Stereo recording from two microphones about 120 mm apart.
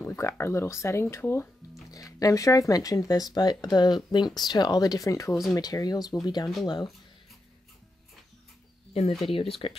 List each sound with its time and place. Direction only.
0.0 s speech: 20° left (ahead or behind)
1.9 s speech: 30° left (ahead or behind)
9.3 s speech: 50° left (ahead or behind)